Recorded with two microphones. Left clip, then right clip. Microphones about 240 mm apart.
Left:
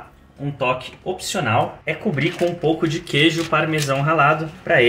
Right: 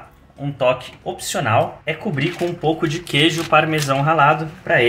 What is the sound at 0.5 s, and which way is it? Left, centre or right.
Speech, right.